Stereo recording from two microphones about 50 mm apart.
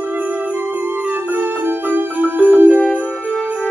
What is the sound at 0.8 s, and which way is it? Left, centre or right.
Jingle bell, right.